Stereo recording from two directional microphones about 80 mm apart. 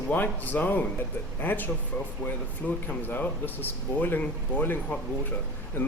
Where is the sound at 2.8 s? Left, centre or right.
Left.